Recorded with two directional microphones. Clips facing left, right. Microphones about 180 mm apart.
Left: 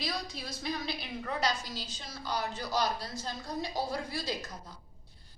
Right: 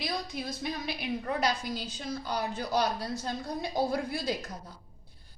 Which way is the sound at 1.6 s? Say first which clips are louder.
Right 7 dB; 55° right (ahead or behind).